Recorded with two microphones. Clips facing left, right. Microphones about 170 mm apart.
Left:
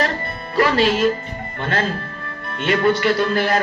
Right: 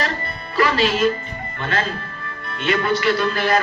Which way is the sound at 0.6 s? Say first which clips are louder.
Left 1 dB; 50° left (ahead or behind).